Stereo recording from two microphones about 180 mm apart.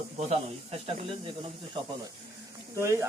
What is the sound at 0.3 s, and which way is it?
Speech, 35° right (ahead or behind).